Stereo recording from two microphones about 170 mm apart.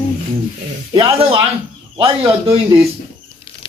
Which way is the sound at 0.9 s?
30° right (ahead or behind).